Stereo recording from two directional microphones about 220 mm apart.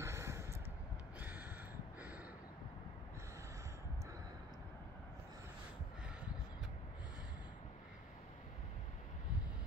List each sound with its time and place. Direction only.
0.0 s vehicle: 10° right (ahead or behind)